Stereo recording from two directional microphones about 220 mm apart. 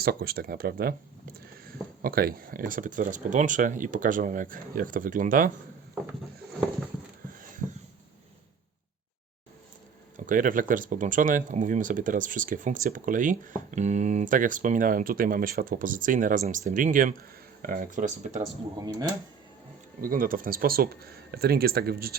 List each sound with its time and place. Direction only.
0.0 s speech: 45° right (ahead or behind)
10.2 s speech: 35° right (ahead or behind)
18.8 s speech: 15° right (ahead or behind)
20.0 s speech: 40° right (ahead or behind)